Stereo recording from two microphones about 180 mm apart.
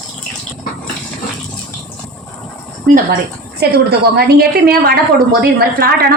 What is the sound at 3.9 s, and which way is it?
Speech, 60° right (ahead or behind).